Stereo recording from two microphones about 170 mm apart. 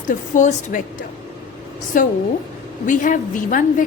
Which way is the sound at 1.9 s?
50° left (ahead or behind).